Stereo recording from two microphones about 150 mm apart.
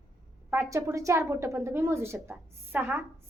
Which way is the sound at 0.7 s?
20° right (ahead or behind).